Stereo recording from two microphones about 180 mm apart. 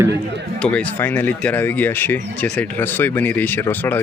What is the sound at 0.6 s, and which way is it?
Speech, 5° left (ahead or behind).